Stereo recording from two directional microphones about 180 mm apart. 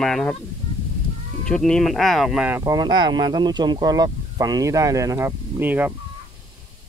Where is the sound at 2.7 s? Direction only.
25° right (ahead or behind).